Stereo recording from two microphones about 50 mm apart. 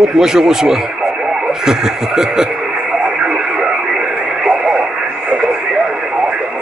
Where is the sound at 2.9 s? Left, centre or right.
Centre.